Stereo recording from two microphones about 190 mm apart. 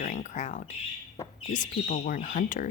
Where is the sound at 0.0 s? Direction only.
40° left (ahead or behind).